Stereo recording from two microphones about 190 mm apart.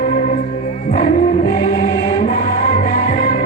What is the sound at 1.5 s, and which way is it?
Music, 45° left (ahead or behind).